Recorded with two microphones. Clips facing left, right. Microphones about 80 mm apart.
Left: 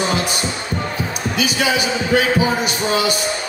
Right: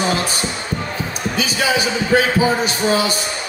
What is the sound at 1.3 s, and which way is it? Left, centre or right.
A man's voice, right.